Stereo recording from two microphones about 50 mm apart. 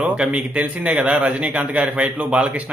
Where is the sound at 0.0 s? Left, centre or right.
Right.